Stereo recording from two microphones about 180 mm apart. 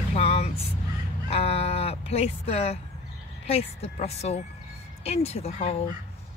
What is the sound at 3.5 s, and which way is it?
Speech, 35° left (ahead or behind).